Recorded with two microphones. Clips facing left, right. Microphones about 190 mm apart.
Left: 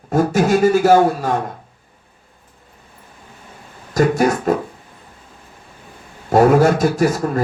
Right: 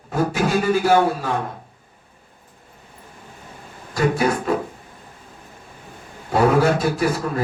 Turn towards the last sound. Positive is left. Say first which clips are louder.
# left 4 dB
turn(degrees=45)  # may be behind; listen again after turning